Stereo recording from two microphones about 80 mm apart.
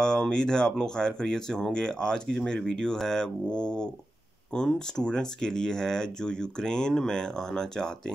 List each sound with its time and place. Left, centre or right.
0.0 s speech: centre